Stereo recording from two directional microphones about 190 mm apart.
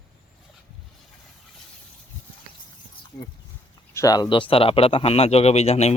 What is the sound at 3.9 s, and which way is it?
Speech, 15° left (ahead or behind).